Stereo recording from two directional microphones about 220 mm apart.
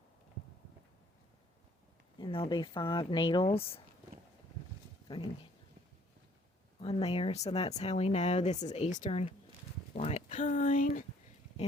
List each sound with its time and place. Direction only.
2.1 s speech: 25° left (ahead or behind)
5.0 s speech: 20° left (ahead or behind)
6.7 s speech: 25° left (ahead or behind)